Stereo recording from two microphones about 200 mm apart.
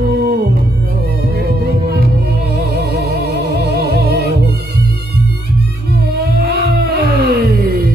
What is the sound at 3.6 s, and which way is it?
Music, 55° right (ahead or behind).